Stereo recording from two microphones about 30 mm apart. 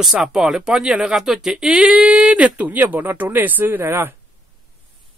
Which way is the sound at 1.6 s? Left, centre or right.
Right.